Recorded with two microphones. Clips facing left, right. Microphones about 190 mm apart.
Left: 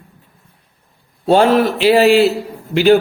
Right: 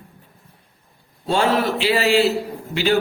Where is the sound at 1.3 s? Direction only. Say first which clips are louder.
Left 7 dB; 55° left (ahead or behind).